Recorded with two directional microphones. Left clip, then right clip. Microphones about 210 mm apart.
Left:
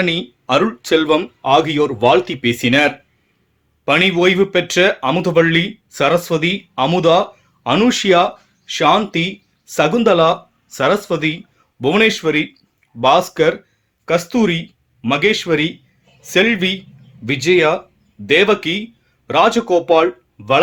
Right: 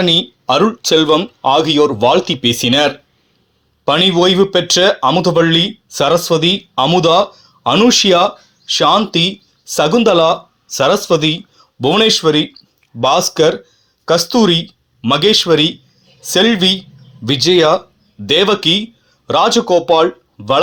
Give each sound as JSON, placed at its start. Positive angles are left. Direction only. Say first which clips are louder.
{"t": 0.0, "sound": "speech", "louder": "right 6 dB", "side_deg": -15}